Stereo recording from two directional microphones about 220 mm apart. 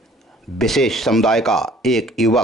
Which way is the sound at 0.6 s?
Centre (ahead or behind).